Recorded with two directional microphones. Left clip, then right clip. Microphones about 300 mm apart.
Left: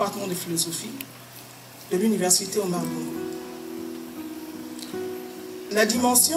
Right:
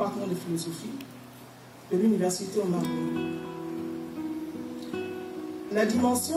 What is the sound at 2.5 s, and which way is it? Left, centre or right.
Speech, centre.